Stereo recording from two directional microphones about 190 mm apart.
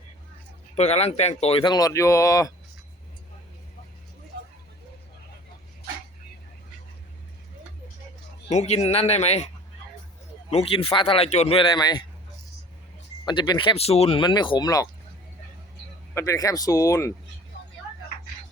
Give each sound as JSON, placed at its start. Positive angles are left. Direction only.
{"t": 0.8, "sound": "speech", "side_deg": 35}
{"t": 8.4, "sound": "speech", "side_deg": 35}
{"t": 10.5, "sound": "speech", "side_deg": 30}
{"t": 13.2, "sound": "speech", "side_deg": 20}
{"t": 16.1, "sound": "speech", "side_deg": 15}